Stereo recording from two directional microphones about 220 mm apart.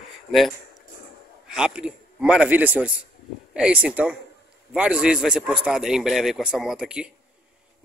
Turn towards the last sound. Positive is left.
turn(degrees=-5)  # may be behind; listen again after turning